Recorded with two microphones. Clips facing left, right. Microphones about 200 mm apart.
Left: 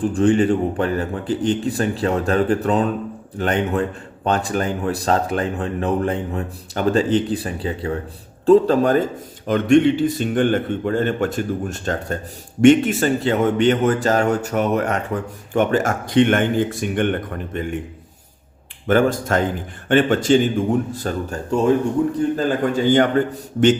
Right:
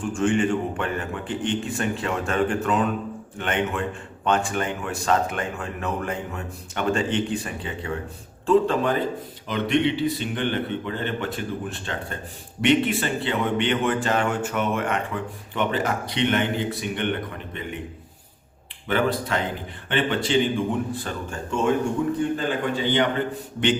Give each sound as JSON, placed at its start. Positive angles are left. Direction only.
{"t": 0.0, "sound": "a man's voice", "side_deg": 35}
{"t": 18.9, "sound": "a man's voice", "side_deg": 45}